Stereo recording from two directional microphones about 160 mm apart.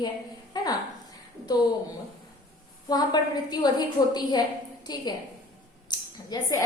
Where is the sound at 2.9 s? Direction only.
25° left (ahead or behind).